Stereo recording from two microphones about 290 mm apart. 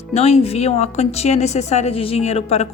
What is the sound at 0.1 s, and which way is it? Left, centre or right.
A woman's voice, left.